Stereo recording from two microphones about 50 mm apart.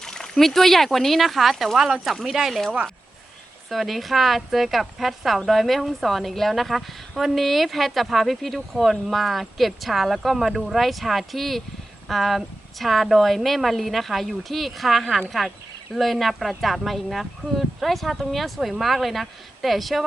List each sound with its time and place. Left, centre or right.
0.0 s a woman's voice: centre
3.7 s a woman's voice: centre